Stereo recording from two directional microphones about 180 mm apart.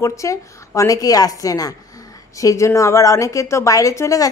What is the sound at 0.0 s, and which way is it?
A woman's voice, 15° left (ahead or behind).